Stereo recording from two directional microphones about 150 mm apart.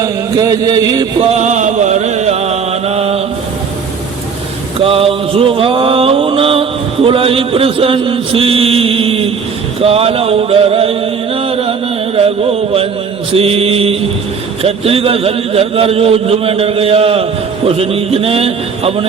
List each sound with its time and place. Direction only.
0.0 s chant: 25° right (ahead or behind)
1.4 s mantra: 55° right (ahead or behind)
4.8 s a sound: 40° right (ahead or behind)
9.8 s chant: 40° right (ahead or behind)
12.1 s a sound: 40° right (ahead or behind)
13.3 s speech: 40° right (ahead or behind)